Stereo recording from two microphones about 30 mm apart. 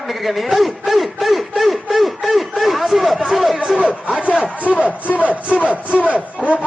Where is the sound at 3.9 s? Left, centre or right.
Right.